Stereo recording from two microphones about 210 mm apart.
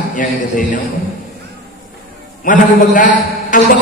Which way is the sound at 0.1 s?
40° left (ahead or behind).